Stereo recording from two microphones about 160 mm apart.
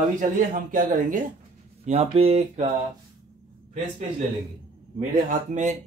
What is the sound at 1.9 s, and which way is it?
Speech, 40° right (ahead or behind).